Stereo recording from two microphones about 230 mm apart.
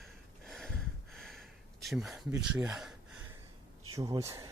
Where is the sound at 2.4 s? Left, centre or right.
Centre.